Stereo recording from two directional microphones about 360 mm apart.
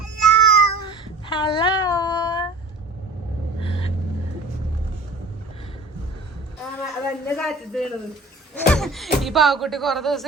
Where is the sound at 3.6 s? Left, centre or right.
Centre.